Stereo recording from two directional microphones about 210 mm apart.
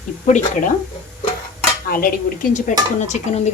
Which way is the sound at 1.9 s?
45° left (ahead or behind).